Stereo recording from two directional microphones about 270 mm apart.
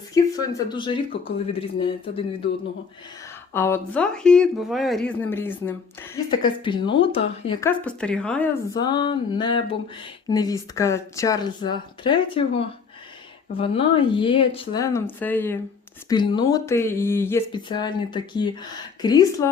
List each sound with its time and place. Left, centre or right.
0.1 s speech: centre
3.5 s speech: centre
7.7 s speech: centre
8.7 s speech: centre